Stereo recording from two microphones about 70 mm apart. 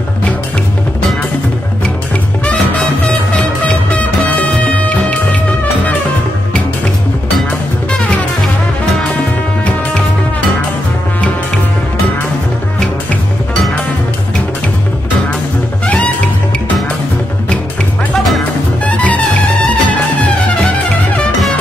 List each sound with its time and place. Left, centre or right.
2.4 s music: centre
7.9 s music: centre
18.1 s music: centre
18.9 s music: left